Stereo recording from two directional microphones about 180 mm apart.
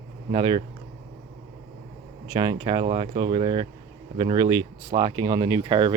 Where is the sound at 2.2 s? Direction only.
20° right (ahead or behind).